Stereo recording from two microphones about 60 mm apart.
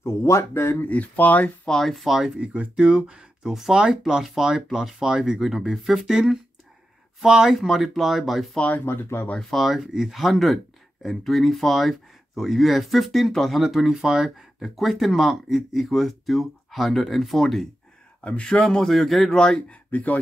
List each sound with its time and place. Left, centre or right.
0.0 s speech: left
0.8 s speech: left
1.7 s speech: centre
8.5 s speech: left
8.8 s speech: left
9.4 s speech: centre
18.2 s a man's voice: centre
19.9 s speech: left